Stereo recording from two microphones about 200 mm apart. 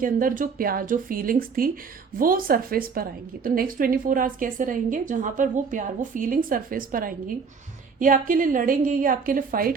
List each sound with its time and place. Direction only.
0.0 s a woman's voice: 45° right (ahead or behind)